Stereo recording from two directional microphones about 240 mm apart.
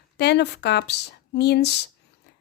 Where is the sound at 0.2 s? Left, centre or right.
Left.